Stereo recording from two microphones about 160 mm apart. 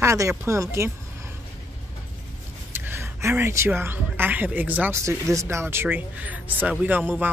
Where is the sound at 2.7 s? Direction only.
15° right (ahead or behind).